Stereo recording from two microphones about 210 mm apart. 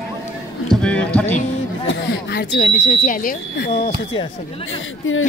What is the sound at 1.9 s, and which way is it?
Speech, 50° left (ahead or behind).